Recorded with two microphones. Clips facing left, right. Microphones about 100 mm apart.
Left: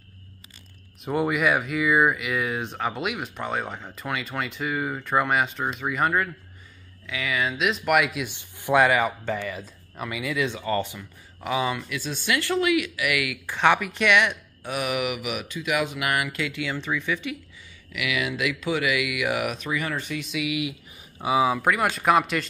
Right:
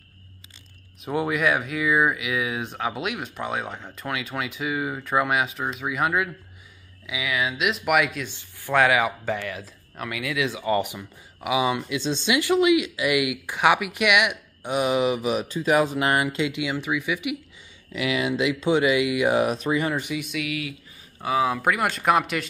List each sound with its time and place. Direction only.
1.0 s speech: centre (ahead or behind)
8.3 s speech: 20° left (ahead or behind)
8.7 s speech: centre (ahead or behind)
10.6 s speech: 15° right (ahead or behind)
17.9 s speech: 30° right (ahead or behind)
20.0 s speech: 10° right (ahead or behind)
20.3 s speech: 10° left (ahead or behind)